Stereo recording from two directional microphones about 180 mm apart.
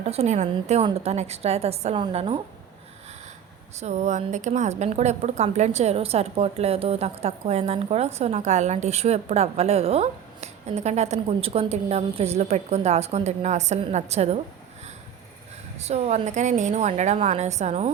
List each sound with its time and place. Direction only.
0.0 s a woman's voice: 35° right (ahead or behind)
3.8 s a woman's voice: 40° right (ahead or behind)
15.8 s a woman's voice: 35° right (ahead or behind)